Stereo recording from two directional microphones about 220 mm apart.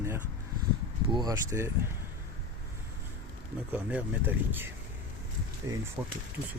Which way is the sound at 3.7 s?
10° right (ahead or behind).